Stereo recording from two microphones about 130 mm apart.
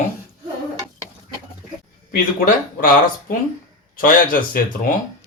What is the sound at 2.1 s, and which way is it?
Speech, 90° left.